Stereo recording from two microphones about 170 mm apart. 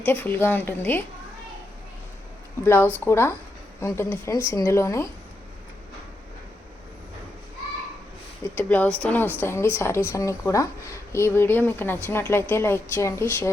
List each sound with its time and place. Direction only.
0.0 s speech: 10° left (ahead or behind)
2.6 s speech: 10° left (ahead or behind)
8.5 s speech: 10° left (ahead or behind)